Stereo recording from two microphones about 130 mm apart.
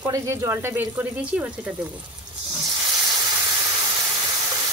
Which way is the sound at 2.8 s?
30° right (ahead or behind).